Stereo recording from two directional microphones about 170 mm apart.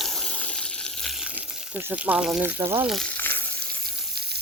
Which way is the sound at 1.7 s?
10° right (ahead or behind).